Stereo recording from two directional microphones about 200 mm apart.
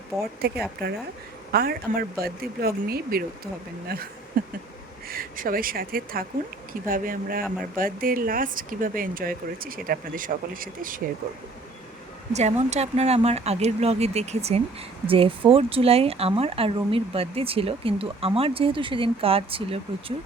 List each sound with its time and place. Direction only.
0.4 s speech: 50° right (ahead or behind)
12.3 s speech: 35° right (ahead or behind)